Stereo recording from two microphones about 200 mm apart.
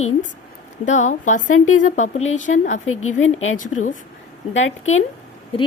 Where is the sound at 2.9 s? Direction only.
90° left.